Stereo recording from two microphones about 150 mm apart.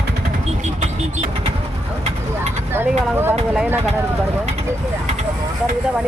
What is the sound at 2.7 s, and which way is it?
Speech, 15° right (ahead or behind).